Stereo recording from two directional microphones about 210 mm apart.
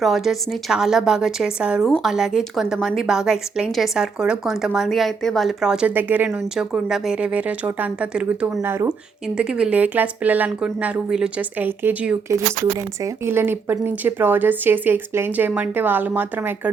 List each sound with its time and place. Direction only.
0.0 s a woman's voice: centre (ahead or behind)